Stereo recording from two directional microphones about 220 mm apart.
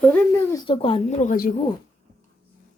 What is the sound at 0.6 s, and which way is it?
Speech, 25° left (ahead or behind).